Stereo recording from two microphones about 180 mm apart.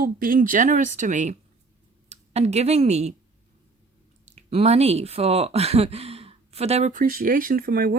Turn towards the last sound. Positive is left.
turn(degrees=-55)  # may be behind; listen again after turning